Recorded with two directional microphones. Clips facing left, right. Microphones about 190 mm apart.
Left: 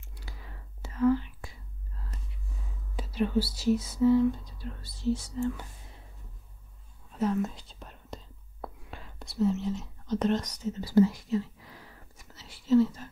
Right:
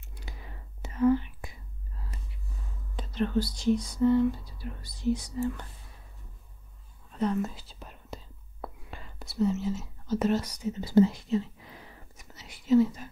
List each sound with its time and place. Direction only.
0.1 s whispering: 20° right (ahead or behind)
3.0 s speech: 10° left (ahead or behind); by 5.4 s 15° right (ahead or behind)
5.4 s speech: centre (ahead or behind)
7.1 s whispering: 5° left (ahead or behind); by 13.1 s 15° right (ahead or behind)